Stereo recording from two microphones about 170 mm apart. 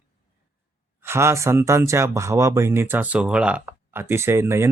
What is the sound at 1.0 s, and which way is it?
Speech, 15° right (ahead or behind).